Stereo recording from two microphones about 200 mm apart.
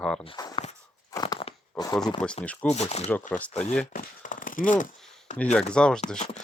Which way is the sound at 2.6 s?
35° left (ahead or behind).